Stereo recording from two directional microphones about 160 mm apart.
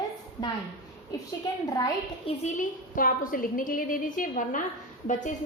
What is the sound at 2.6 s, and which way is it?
A woman's voice, 60° left (ahead or behind).